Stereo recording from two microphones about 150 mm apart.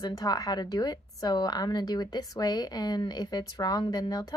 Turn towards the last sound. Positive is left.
turn(degrees=25)  # may be behind; listen again after turning